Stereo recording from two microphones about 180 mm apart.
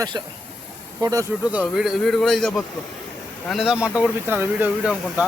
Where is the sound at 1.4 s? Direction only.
5° right (ahead or behind).